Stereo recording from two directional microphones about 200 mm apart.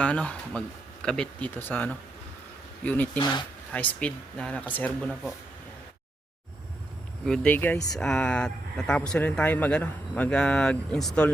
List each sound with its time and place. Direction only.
0.0 s speech: 5° left (ahead or behind)
3.2 s speech: 20° left (ahead or behind)
3.7 s speech: 5° left (ahead or behind)
7.3 s speech: 5° left (ahead or behind)